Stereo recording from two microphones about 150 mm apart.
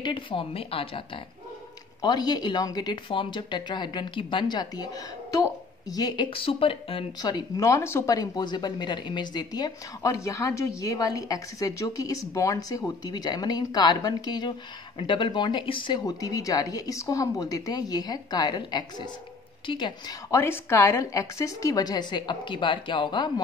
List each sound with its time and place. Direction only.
0.0 s speech: 35° left (ahead or behind)
2.0 s speech: 25° left (ahead or behind)
5.9 s speech: 25° left (ahead or behind)
7.2 s speech: 25° left (ahead or behind)